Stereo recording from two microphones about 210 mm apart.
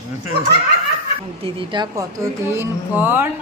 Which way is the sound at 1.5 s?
20° right (ahead or behind).